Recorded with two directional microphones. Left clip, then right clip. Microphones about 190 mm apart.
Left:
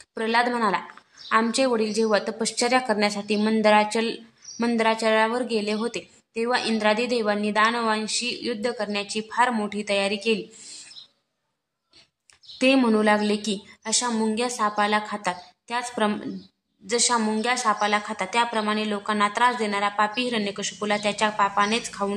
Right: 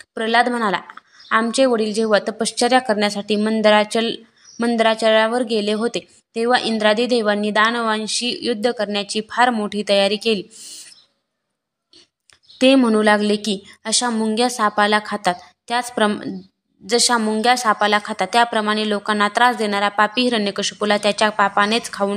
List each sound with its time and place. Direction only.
0.1 s a woman's voice: 25° right (ahead or behind)
12.5 s a woman's voice: 25° right (ahead or behind)